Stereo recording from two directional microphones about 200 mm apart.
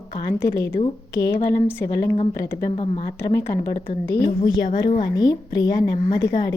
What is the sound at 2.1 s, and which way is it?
Speech, 30° left (ahead or behind).